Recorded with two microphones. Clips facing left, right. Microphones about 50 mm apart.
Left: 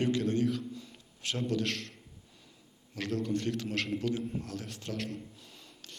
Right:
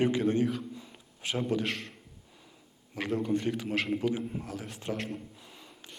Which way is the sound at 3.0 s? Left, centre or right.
Centre.